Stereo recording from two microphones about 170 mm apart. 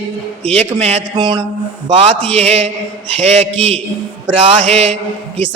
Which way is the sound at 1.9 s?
35° right (ahead or behind).